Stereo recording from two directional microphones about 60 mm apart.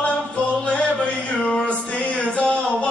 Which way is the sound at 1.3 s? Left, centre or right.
Centre.